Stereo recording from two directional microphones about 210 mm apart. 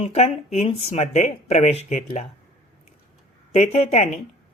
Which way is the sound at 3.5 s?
30° left (ahead or behind).